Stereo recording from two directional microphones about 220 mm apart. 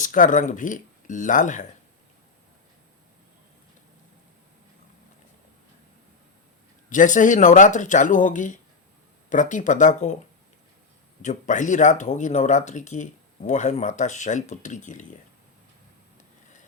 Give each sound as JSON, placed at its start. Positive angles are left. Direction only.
{"t": 0.0, "sound": "speech", "side_deg": 35}
{"t": 6.9, "sound": "speech", "side_deg": 35}
{"t": 11.2, "sound": "speech", "side_deg": 35}